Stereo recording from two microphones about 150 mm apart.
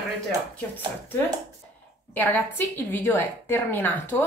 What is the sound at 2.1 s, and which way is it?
A woman's voice, 10° left (ahead or behind).